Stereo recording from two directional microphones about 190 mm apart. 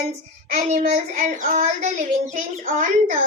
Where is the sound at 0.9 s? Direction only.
40° right (ahead or behind).